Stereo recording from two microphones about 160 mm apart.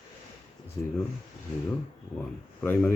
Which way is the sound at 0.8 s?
30° left (ahead or behind).